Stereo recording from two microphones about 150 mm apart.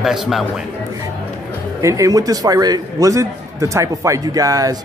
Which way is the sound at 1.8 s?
20° right (ahead or behind).